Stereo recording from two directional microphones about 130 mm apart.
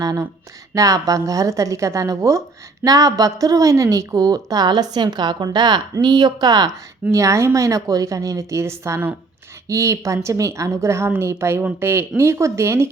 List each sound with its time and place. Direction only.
0.0 s a woman's voice: 30° right (ahead or behind)